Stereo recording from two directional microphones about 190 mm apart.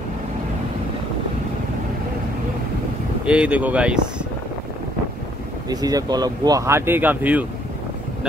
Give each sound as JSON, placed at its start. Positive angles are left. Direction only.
{"t": 3.3, "sound": "speech", "side_deg": -5}
{"t": 5.7, "sound": "speech", "side_deg": -20}